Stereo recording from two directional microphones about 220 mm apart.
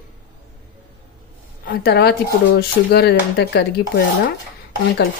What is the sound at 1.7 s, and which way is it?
Speech, 45° left (ahead or behind).